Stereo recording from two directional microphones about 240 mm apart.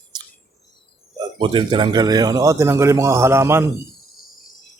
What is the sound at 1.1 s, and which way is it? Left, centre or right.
A man's voice, centre.